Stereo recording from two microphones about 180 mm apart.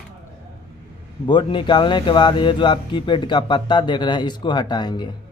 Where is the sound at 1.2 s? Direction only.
25° left (ahead or behind).